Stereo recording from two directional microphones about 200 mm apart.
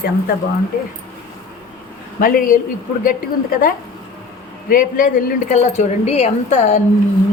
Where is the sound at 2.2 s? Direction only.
45° left (ahead or behind).